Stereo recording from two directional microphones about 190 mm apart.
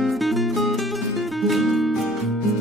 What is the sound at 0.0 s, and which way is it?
Music, centre (ahead or behind).